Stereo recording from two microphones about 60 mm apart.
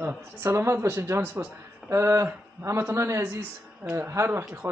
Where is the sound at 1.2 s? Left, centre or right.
Right.